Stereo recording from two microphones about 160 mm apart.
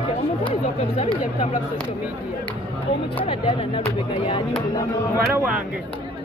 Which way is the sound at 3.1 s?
35° left (ahead or behind).